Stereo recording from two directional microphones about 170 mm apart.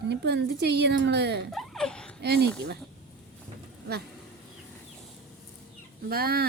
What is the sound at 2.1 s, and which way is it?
Speech, 75° right (ahead or behind).